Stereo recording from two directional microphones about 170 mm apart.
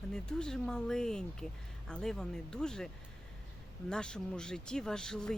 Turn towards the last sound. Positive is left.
turn(degrees=5)  # may be behind; listen again after turning